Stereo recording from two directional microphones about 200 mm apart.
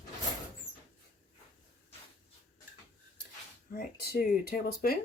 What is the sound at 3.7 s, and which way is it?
Speech, 50° left (ahead or behind).